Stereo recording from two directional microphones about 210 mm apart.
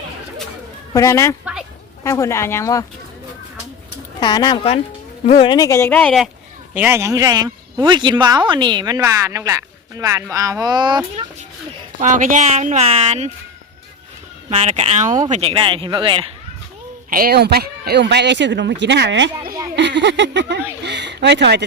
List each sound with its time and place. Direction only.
0.9 s speech: 15° left (ahead or behind)
4.2 s speech: 20° left (ahead or behind)
5.5 s speech: 15° left (ahead or behind)
6.7 s speech: 10° right (ahead or behind)
11.9 s speech: 35° right (ahead or behind)
14.5 s speech: 30° right (ahead or behind)
17.1 s speech: 45° right (ahead or behind)